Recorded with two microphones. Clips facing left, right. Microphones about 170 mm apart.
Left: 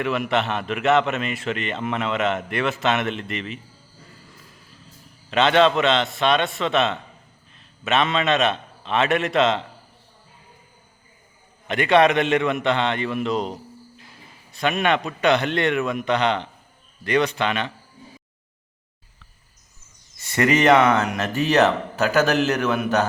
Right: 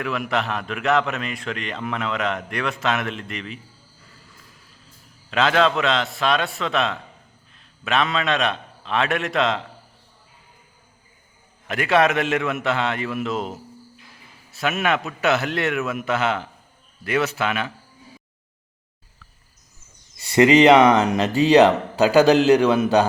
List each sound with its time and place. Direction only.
0.0 s a man's voice: centre (ahead or behind)
5.3 s a man's voice: centre (ahead or behind)
11.7 s a man's voice: centre (ahead or behind)
20.2 s a man's voice: 15° right (ahead or behind)
21.1 s speech: 30° right (ahead or behind)
21.5 s a man's voice: 15° right (ahead or behind)